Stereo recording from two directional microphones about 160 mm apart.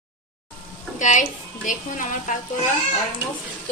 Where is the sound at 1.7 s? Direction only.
55° left (ahead or behind).